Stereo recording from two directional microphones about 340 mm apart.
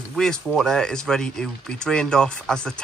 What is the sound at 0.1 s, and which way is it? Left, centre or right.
Speech, centre.